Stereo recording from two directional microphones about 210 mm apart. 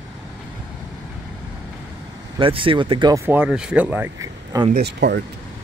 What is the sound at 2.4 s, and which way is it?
Speech, 25° right (ahead or behind).